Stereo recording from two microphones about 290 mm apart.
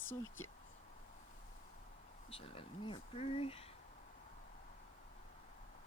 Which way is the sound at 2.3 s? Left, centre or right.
Centre.